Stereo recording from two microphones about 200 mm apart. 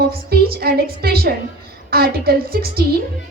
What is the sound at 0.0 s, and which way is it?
A woman's voice, 50° right (ahead or behind).